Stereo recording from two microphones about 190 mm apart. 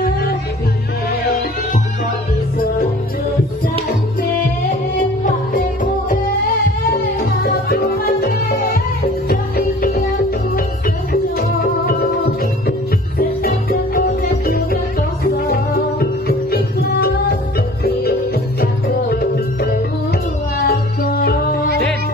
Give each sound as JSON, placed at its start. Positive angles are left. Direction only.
{"t": 0.0, "sound": "music", "side_deg": 55}
{"t": 6.9, "sound": "music", "side_deg": 55}
{"t": 11.1, "sound": "music", "side_deg": 50}